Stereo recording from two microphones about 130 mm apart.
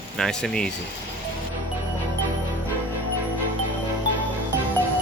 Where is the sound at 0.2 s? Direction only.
5° left (ahead or behind).